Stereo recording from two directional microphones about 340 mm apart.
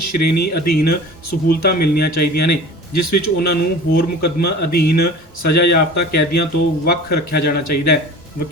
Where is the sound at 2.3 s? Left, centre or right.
Left.